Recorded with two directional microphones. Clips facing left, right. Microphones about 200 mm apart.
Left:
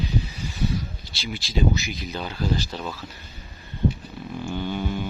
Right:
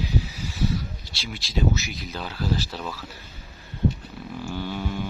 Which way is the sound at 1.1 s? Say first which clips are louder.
Left 2 dB; centre (ahead or behind).